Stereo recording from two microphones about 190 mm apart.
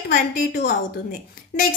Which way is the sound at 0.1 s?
55° left (ahead or behind).